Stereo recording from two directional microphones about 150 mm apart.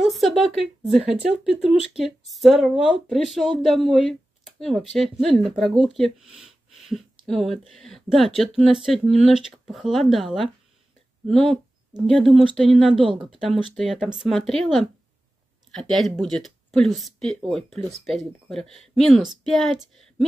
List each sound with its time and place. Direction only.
0.0 s a woman's voice: centre (ahead or behind)
13.0 s speech: 35° right (ahead or behind)
13.7 s speech: centre (ahead or behind)